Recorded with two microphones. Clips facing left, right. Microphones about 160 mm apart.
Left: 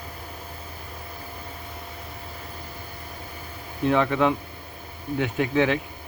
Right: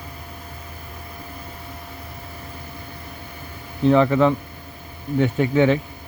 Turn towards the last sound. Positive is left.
turn(degrees=0)  # may be behind; listen again after turning